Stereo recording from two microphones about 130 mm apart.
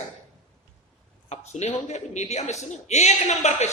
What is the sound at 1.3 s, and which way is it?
Speech, 60° left (ahead or behind).